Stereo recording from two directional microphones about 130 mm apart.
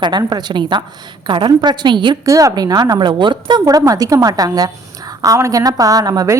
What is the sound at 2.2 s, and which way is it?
A woman's voice, 25° right (ahead or behind).